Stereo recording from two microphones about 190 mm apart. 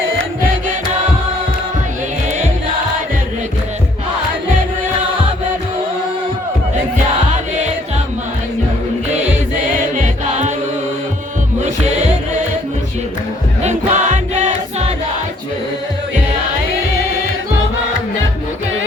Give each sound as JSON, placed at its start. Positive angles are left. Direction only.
{"t": 9.9, "sound": "music", "side_deg": -40}
{"t": 13.6, "sound": "music", "side_deg": -40}